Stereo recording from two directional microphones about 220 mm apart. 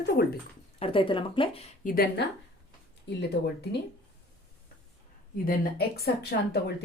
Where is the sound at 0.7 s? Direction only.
25° left (ahead or behind).